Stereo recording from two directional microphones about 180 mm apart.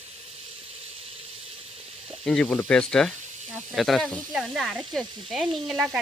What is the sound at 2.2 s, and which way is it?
Speech, 5° left (ahead or behind).